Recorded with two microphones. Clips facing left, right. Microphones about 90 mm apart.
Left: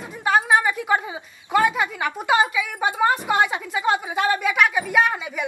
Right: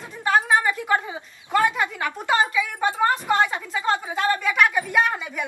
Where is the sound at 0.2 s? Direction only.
10° left (ahead or behind).